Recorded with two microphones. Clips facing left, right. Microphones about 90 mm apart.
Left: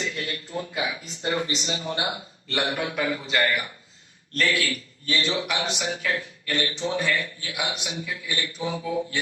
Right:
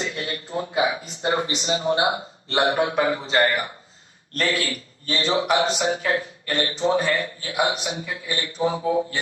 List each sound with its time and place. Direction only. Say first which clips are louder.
0.0 s a man's voice: right 2 dB; 30° right (ahead or behind)